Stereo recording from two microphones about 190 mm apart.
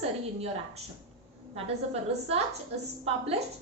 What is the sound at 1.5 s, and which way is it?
A woman's voice, 30° right (ahead or behind).